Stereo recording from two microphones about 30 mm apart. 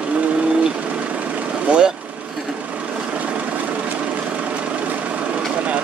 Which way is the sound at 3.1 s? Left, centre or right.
Right.